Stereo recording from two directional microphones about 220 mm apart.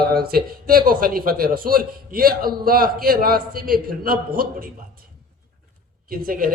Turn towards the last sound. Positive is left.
turn(degrees=-40)  # may be behind; listen again after turning